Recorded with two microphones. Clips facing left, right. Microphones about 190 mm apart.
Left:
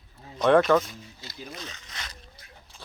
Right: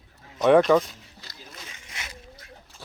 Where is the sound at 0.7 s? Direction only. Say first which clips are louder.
Right 2 dB; 10° right (ahead or behind).